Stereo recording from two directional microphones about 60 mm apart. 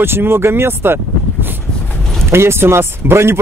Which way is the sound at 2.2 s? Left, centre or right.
Right.